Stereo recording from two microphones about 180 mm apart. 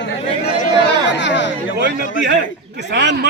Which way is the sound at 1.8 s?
70° right (ahead or behind).